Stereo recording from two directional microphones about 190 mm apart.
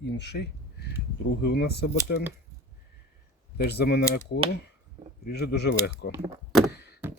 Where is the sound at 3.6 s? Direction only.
60° left (ahead or behind).